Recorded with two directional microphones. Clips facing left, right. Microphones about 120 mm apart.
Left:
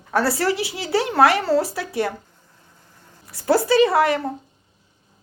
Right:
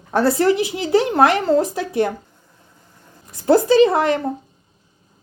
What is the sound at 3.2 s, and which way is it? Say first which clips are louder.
Speech: right 4 dB; 20° right (ahead or behind).